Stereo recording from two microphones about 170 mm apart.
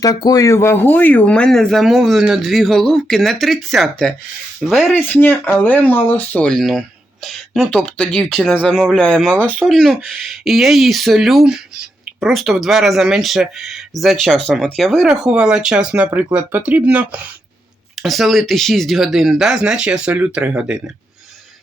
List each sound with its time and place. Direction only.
0.0 s speech: 20° left (ahead or behind); by 4.9 s centre (ahead or behind)
4.9 s speech: 10° left (ahead or behind); by 20.8 s 5° right (ahead or behind)